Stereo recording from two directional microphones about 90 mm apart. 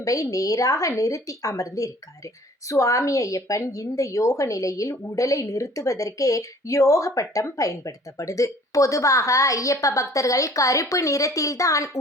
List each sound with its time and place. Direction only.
0.0 s a woman's voice: 40° left (ahead or behind)